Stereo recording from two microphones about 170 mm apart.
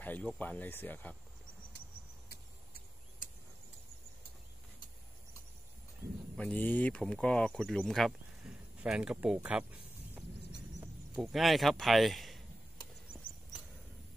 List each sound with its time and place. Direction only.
0.0 s speech: 10° left (ahead or behind)
2.2 s a sound: 60° left (ahead or behind)
6.3 s speech: 10° left (ahead or behind)